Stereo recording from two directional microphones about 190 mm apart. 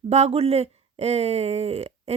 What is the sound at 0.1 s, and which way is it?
A woman's voice, 35° right (ahead or behind).